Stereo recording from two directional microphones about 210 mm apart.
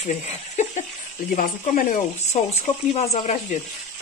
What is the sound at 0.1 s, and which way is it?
Speech, 35° left (ahead or behind).